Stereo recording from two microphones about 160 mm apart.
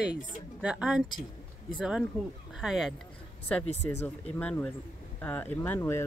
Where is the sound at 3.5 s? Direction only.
10° left (ahead or behind).